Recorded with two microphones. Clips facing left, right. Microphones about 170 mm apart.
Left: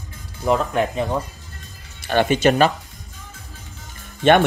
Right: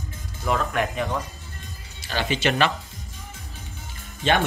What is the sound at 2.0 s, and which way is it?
Speech, 55° left (ahead or behind).